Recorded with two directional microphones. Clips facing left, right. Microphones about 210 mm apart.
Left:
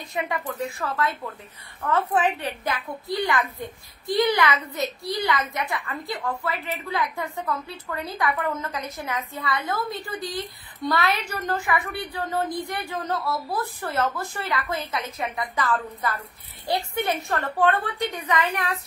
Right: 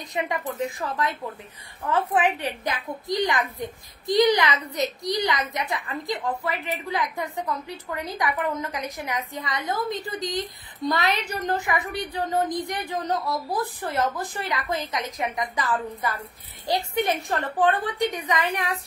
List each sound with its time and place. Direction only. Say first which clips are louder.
0.1 s a woman's voice: right 1 dB; 20° right (ahead or behind)